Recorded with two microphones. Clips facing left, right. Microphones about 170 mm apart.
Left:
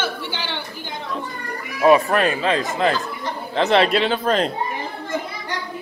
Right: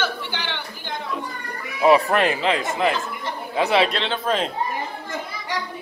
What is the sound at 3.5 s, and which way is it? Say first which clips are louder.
Speech: left 2 dB; 5° right (ahead or behind).